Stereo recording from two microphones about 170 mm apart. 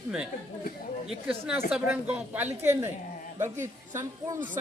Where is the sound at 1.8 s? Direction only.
10° right (ahead or behind).